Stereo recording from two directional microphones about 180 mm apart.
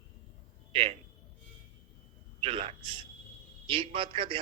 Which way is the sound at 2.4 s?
30° right (ahead or behind).